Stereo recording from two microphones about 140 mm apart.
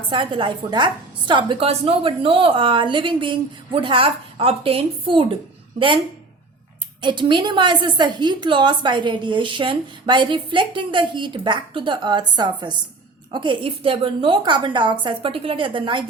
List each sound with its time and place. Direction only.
0.1 s a woman's voice: 35° right (ahead or behind)
7.0 s a woman's voice: 35° right (ahead or behind)